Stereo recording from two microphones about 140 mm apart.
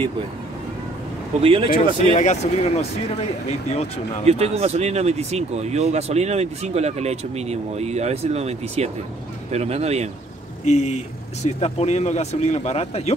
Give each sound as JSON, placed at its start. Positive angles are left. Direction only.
{"t": 1.4, "sound": "speech", "side_deg": -40}
{"t": 2.1, "sound": "speech", "side_deg": 50}
{"t": 4.3, "sound": "speech", "side_deg": -50}
{"t": 10.6, "sound": "speech", "side_deg": 55}